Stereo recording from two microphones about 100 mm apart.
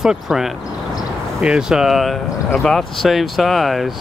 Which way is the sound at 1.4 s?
10° right (ahead or behind).